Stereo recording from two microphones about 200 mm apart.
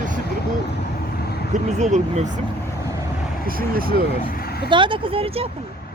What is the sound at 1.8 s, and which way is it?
Speech, 35° right (ahead or behind).